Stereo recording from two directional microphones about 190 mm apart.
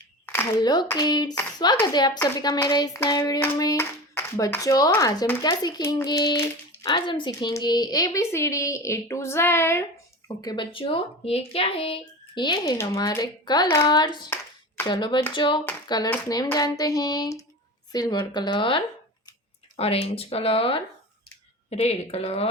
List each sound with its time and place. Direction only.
0.6 s hands: 20° left (ahead or behind)
1.4 s a child's voice: 20° left (ahead or behind)
2.1 s hands: 15° left (ahead or behind)
6.9 s a woman's voice: 25° left (ahead or behind)
10.2 s hands: 20° left (ahead or behind)
19.7 s speech: 30° left (ahead or behind)